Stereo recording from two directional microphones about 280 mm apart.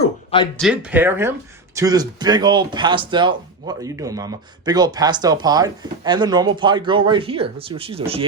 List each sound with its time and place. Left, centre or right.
0.6 s speech: centre; by 8.2 s right